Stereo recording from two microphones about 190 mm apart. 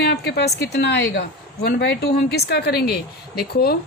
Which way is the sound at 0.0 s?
60° left (ahead or behind).